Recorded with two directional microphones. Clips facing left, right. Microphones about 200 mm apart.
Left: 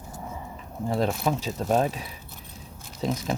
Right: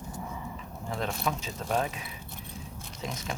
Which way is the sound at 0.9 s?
35° left (ahead or behind).